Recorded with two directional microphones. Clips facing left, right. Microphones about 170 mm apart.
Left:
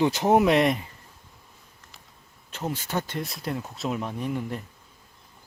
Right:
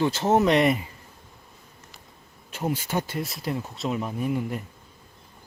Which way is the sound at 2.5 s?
10° right (ahead or behind).